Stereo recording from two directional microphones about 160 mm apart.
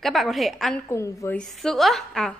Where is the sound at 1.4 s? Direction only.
Centre (ahead or behind).